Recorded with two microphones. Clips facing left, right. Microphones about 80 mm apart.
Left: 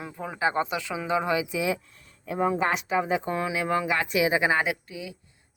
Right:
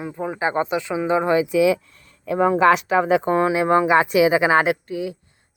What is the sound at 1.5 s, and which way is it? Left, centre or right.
Speech, right.